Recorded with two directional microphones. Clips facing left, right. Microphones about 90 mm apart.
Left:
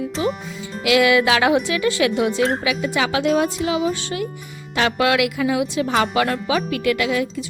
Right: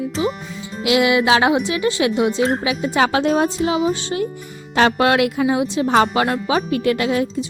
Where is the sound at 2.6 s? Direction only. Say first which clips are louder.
Right 3 dB; 35° right (ahead or behind).